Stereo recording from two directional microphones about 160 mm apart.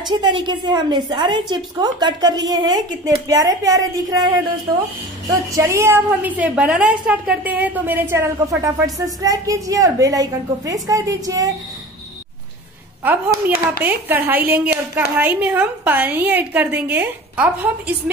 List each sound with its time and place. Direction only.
0.0 s a woman's voice: 25° right (ahead or behind)
5.3 s a woman's voice: 20° right (ahead or behind)
13.7 s a woman's voice: 10° right (ahead or behind)